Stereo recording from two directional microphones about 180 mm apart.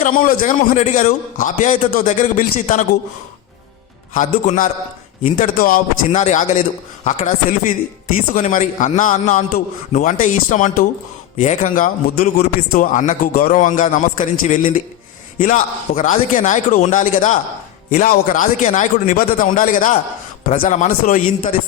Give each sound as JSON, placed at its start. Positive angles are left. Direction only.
{"t": 0.0, "sound": "a man's voice", "side_deg": 50}
{"t": 4.1, "sound": "a man's voice", "side_deg": 45}
{"t": 6.1, "sound": "a man's voice", "side_deg": 40}